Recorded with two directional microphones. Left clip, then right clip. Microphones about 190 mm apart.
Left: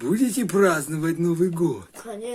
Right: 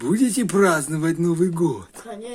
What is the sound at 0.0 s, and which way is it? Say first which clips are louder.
A man's voice: right 2 dB; 15° right (ahead or behind).